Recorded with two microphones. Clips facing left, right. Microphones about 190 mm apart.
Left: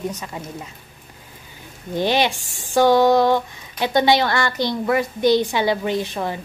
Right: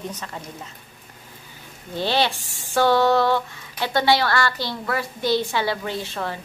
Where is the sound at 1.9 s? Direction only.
15° left (ahead or behind).